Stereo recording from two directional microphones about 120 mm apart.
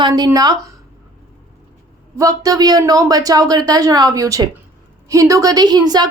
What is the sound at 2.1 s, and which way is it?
A woman's voice, 30° right (ahead or behind).